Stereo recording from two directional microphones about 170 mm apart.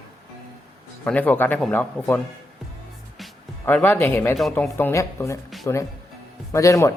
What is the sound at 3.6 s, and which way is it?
Speech, 10° left (ahead or behind).